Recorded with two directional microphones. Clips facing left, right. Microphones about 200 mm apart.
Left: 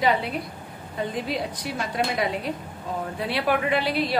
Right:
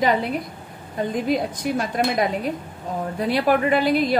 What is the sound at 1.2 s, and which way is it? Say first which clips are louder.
Speech: right 7 dB; 50° right (ahead or behind).